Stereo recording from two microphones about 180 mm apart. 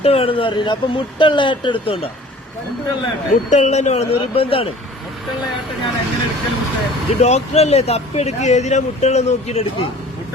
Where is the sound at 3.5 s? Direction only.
40° left (ahead or behind).